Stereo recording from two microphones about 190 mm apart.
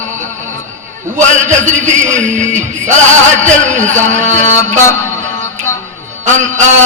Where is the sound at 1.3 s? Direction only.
40° right (ahead or behind).